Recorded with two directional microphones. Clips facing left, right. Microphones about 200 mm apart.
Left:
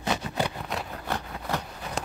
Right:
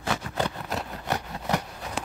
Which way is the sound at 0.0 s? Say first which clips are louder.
Even; 20° left (ahead or behind).